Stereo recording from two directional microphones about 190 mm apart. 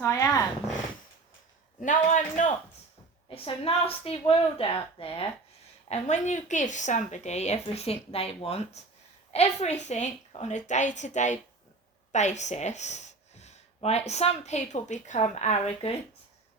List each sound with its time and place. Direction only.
0.0 s dog: 15° left (ahead or behind)
1.8 s a man's voice: 40° left (ahead or behind)
3.2 s a woman's voice: 30° left (ahead or behind)